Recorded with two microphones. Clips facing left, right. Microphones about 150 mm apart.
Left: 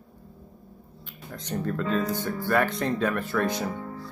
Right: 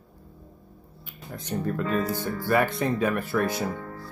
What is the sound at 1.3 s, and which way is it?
Speech, 5° right (ahead or behind).